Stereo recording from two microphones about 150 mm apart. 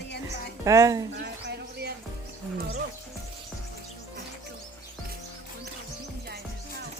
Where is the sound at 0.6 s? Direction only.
20° right (ahead or behind).